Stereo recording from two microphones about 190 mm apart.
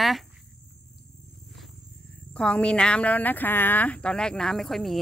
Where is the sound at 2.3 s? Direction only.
5° left (ahead or behind).